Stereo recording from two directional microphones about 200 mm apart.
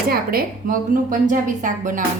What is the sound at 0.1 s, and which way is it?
A woman's voice, 50° right (ahead or behind).